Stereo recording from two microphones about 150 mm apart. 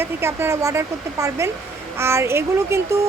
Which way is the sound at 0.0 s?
15° right (ahead or behind).